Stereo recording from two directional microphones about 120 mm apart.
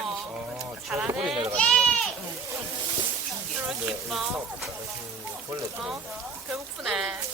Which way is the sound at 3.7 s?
5° right (ahead or behind).